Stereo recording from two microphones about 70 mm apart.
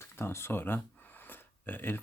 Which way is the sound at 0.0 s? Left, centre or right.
Left.